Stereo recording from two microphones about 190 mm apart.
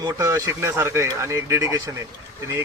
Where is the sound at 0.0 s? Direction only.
15° right (ahead or behind).